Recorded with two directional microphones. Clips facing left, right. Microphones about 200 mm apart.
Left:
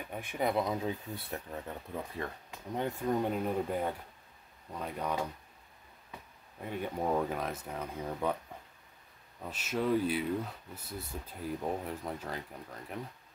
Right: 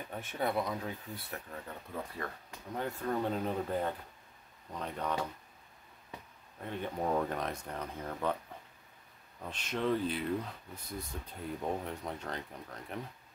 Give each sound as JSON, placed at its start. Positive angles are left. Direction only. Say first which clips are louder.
{"t": 0.1, "sound": "speech", "louder": "left 2 dB", "side_deg": 10}
{"t": 6.6, "sound": "speech", "louder": "left 1 dB", "side_deg": 10}
{"t": 9.4, "sound": "speech", "louder": "left 1 dB", "side_deg": 5}